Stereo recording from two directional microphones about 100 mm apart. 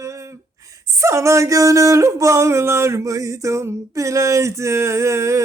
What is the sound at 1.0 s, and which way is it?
Speech, 30° right (ahead or behind).